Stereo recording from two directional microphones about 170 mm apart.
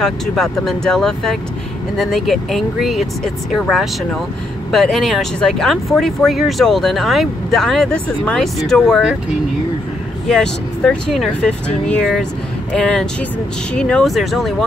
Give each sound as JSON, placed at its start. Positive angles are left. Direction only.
{"t": 0.0, "sound": "speech", "side_deg": 5}
{"t": 10.2, "sound": "speech", "side_deg": 5}